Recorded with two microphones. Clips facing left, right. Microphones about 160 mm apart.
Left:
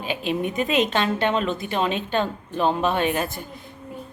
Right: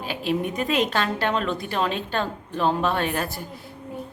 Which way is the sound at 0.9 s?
20° left (ahead or behind).